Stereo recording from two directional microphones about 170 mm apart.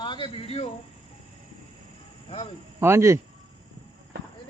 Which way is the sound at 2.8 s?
15° right (ahead or behind).